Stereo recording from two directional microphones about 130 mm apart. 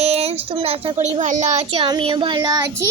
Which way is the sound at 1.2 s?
65° right (ahead or behind).